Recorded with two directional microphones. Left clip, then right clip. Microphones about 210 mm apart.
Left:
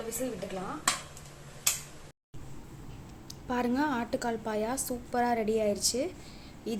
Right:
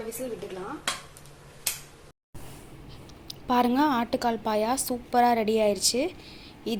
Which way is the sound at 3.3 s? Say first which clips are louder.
Right 8 dB; 10° right (ahead or behind).